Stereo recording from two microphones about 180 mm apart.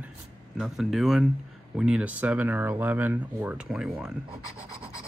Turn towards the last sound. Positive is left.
turn(degrees=-5)  # may be behind; listen again after turning